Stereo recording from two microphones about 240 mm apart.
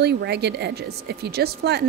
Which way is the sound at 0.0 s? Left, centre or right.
Right.